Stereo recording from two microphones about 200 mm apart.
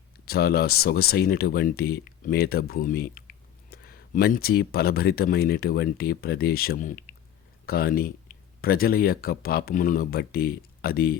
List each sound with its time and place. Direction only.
0.3 s speech: 50° left (ahead or behind)